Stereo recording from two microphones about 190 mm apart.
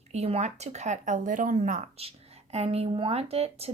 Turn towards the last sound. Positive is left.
turn(degrees=-30)  # may be behind; listen again after turning